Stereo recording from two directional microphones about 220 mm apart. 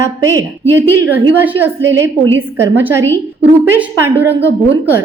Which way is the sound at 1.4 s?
10° right (ahead or behind).